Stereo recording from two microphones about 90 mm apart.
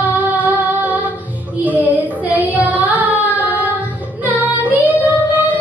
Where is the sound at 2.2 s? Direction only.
15° right (ahead or behind).